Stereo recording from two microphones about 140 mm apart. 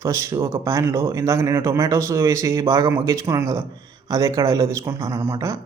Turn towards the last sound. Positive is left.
turn(degrees=-20)  # may be behind; listen again after turning